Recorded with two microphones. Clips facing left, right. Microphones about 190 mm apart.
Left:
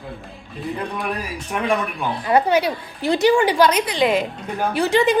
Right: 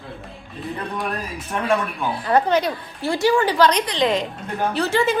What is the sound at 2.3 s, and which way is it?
A woman's voice, 10° left (ahead or behind).